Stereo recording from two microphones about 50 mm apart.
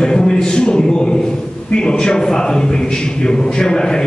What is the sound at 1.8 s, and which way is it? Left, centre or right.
Music, centre.